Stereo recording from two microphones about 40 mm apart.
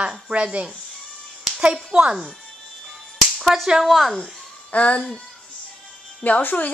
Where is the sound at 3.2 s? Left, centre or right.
Centre.